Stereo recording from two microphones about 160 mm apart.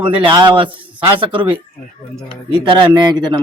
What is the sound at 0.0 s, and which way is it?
Speech, 35° right (ahead or behind).